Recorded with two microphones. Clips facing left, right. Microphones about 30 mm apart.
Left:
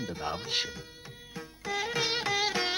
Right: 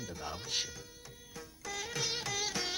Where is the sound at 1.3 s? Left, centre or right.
Left.